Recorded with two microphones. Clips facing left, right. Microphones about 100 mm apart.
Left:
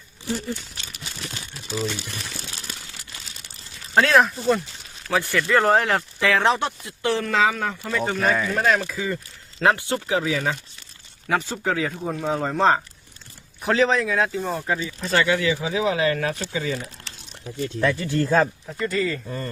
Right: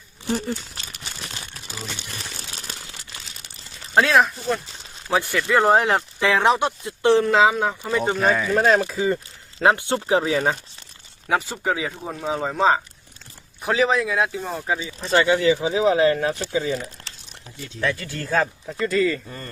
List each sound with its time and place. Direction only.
0.3 s speech: 55° right (ahead or behind)
3.9 s speech: 5° right (ahead or behind)
5.0 s speech: 20° right (ahead or behind)
8.3 s speech: centre (ahead or behind)
8.5 s speech: 30° right (ahead or behind)
11.3 s speech: 15° right (ahead or behind)
15.0 s speech: 25° right (ahead or behind)
17.9 s speech: 20° left (ahead or behind)
18.8 s speech: 70° right (ahead or behind)